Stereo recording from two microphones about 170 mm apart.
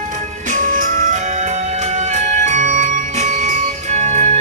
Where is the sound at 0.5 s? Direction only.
50° right (ahead or behind).